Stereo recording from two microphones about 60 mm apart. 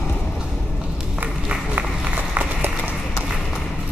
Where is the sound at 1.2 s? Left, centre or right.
Right.